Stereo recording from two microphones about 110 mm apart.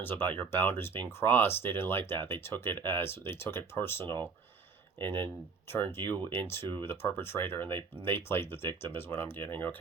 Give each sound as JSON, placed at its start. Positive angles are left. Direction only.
{"t": 0.0, "sound": "speech", "side_deg": 20}